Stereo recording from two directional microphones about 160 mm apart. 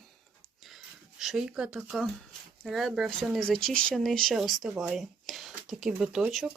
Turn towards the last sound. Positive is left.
turn(degrees=0)  # may be behind; listen again after turning